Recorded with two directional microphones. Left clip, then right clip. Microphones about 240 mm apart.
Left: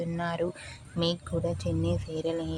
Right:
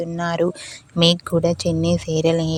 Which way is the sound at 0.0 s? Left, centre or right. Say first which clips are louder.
Right 10 dB; right.